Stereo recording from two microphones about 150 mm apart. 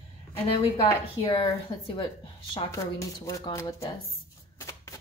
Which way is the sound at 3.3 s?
25° left (ahead or behind).